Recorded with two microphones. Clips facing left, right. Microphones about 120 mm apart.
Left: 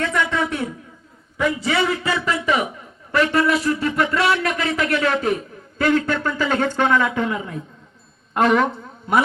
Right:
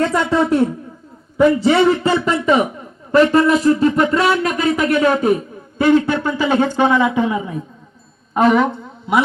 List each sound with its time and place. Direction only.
0.0 s a man's voice: 35° right (ahead or behind); by 8.6 s 5° right (ahead or behind)